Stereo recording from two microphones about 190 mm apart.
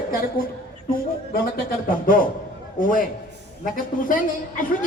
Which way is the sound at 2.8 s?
45° left (ahead or behind).